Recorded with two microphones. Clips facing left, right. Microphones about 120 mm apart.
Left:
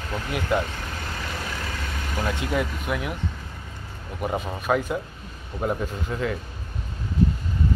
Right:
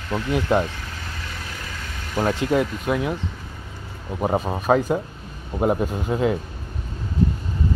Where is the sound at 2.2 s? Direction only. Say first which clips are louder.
Right 6 dB; 25° right (ahead or behind).